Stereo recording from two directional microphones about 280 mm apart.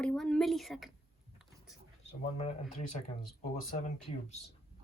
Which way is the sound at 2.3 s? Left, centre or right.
Left.